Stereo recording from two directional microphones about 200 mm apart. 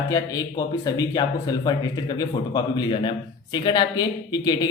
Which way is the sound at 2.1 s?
20° left (ahead or behind).